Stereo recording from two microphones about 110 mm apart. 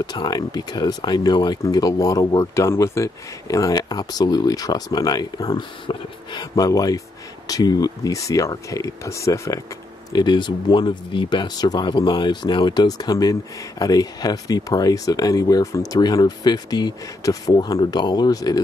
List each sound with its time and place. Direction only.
0.0 s speech: 40° left (ahead or behind)
10.1 s speech: 40° left (ahead or behind)